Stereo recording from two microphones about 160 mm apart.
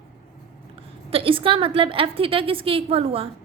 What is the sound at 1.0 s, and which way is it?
A woman's voice, 35° right (ahead or behind).